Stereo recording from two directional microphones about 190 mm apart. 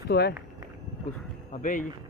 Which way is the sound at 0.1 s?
60° left (ahead or behind).